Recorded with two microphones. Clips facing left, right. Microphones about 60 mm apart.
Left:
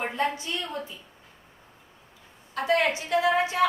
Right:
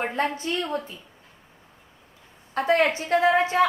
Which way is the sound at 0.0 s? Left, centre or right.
Right.